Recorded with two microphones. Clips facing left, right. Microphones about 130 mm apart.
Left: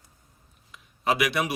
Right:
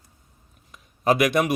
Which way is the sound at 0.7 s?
45° right (ahead or behind).